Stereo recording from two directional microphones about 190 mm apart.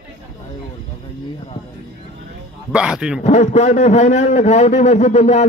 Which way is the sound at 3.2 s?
35° left (ahead or behind).